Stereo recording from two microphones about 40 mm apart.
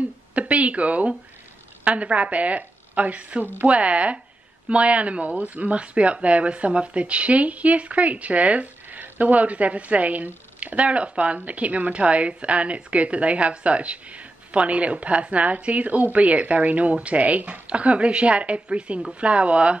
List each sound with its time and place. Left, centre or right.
0.3 s speech: right